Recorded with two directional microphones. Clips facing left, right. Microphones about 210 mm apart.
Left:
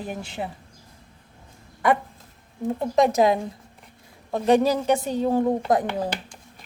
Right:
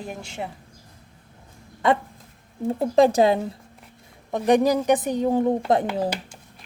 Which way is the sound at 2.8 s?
30° right (ahead or behind).